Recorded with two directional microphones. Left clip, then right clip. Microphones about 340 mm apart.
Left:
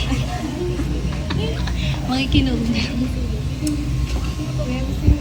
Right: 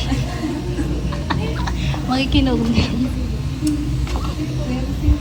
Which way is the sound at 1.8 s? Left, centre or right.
Centre.